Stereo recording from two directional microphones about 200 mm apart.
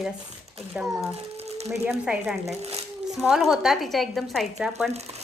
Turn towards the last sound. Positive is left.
turn(degrees=-30)  # may be behind; listen again after turning